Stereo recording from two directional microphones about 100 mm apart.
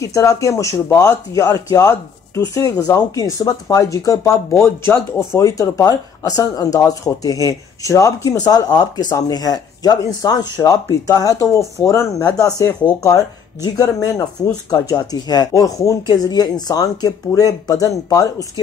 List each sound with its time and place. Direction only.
0.0 s speech: 30° left (ahead or behind)